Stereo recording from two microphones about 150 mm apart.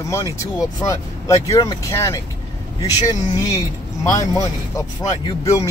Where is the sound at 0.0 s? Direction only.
20° left (ahead or behind).